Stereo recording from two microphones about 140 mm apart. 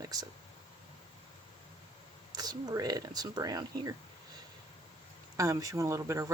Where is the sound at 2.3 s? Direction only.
30° right (ahead or behind).